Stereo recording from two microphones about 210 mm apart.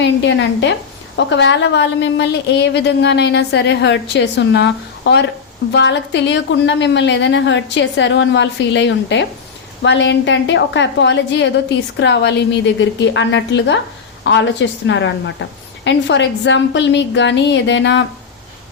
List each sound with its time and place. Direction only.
0.0 s a woman's voice: 60° left (ahead or behind)